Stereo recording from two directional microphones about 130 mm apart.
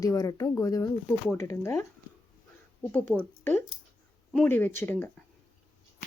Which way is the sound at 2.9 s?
15° left (ahead or behind).